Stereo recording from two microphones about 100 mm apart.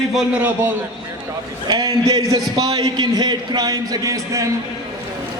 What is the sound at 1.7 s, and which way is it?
A man's voice, 40° right (ahead or behind).